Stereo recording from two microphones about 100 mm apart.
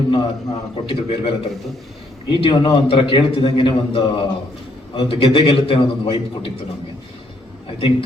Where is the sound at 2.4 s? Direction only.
55° left (ahead or behind).